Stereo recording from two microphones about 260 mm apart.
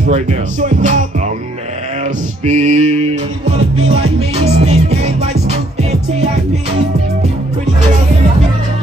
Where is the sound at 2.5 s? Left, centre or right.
Right.